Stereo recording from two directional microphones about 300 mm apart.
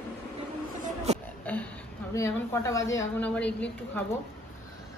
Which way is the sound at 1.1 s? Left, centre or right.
Right.